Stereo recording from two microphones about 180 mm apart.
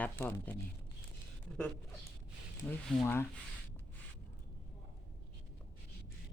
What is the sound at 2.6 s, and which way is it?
Speech, 10° left (ahead or behind).